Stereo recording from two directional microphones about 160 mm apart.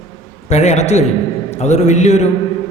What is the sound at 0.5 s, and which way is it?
A man's voice, 45° left (ahead or behind).